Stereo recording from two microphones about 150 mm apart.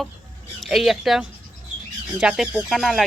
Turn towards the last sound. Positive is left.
turn(degrees=0)  # may be behind; listen again after turning